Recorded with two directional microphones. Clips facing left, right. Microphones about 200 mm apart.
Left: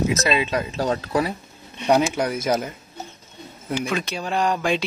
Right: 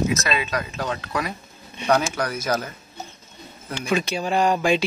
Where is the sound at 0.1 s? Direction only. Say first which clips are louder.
Left 3 dB; 30° left (ahead or behind).